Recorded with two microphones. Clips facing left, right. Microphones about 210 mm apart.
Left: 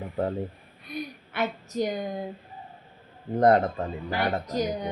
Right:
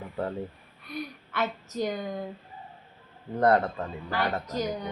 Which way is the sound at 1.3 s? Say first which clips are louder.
Left 1 dB; 15° left (ahead or behind).